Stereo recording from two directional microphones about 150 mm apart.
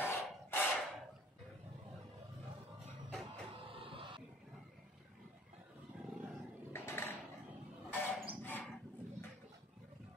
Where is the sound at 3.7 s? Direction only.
35° right (ahead or behind).